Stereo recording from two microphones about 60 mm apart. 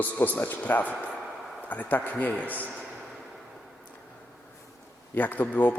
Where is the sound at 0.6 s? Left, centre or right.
Left.